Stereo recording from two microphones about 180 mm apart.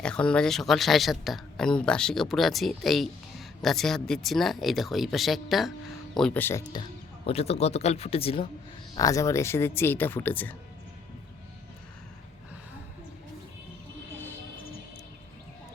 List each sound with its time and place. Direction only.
0.0 s speech: 5° left (ahead or behind)
7.3 s speech: 35° left (ahead or behind)
9.0 s speech: 20° left (ahead or behind)